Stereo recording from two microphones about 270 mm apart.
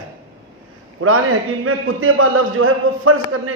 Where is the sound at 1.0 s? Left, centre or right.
Right.